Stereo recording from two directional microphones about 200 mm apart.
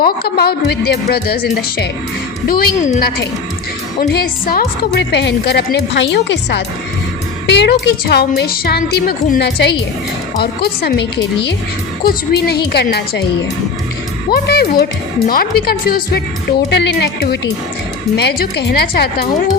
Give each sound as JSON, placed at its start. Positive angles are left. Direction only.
{"t": 0.0, "sound": "a woman's voice", "side_deg": 50}
{"t": 14.4, "sound": "a woman's voice", "side_deg": 50}